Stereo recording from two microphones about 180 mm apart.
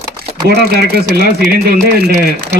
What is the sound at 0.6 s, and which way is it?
Speech, 60° right (ahead or behind).